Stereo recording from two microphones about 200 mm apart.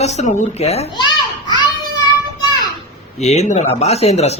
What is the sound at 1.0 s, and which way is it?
Children playing, 20° left (ahead or behind).